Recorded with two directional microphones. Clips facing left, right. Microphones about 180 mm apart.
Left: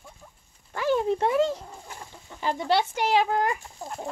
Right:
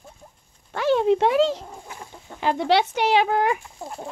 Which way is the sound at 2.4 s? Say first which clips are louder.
Right 4 dB; 75° right (ahead or behind).